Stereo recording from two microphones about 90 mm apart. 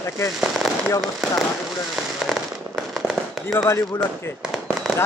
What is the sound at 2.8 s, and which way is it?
Firecracker, centre (ahead or behind).